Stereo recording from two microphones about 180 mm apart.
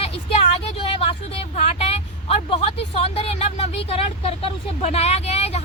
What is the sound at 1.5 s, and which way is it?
Speech, 35° left (ahead or behind).